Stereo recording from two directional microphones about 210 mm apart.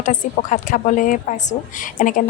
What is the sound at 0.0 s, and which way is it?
Speech, 35° left (ahead or behind).